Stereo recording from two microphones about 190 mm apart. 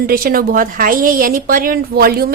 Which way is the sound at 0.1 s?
50° right (ahead or behind).